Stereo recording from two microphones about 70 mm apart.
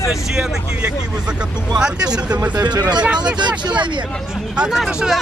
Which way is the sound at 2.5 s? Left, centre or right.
Right.